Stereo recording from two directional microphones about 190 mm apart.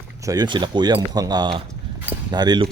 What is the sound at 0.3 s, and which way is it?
Speech, 20° right (ahead or behind).